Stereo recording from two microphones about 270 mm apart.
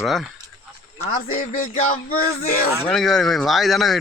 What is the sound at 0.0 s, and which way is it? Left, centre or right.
Speech, centre.